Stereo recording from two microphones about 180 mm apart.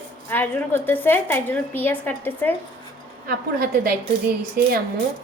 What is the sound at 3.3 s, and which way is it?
Speech, 55° right (ahead or behind).